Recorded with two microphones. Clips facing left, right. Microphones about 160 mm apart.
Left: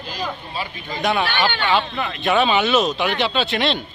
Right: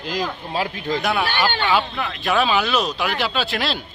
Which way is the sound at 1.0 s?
Centre (ahead or behind).